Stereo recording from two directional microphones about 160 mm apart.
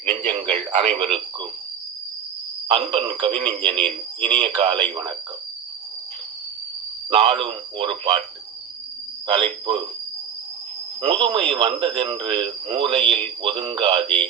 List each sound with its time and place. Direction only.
0.0 s speech: 40° right (ahead or behind)
2.6 s speech: 40° right (ahead or behind)
7.1 s speech: 40° right (ahead or behind)
9.2 s speech: 35° right (ahead or behind)
11.0 s speech: 40° right (ahead or behind)